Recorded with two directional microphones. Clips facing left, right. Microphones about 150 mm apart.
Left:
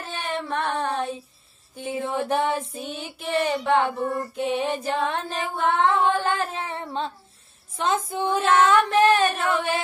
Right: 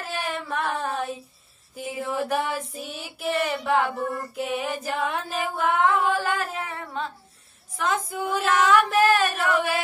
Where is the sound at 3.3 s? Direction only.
25° left (ahead or behind).